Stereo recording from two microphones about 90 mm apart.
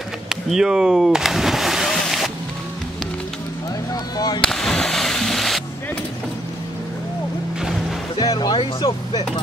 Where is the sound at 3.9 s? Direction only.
45° left (ahead or behind).